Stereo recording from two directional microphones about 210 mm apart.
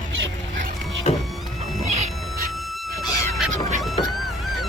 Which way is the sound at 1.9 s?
35° right (ahead or behind).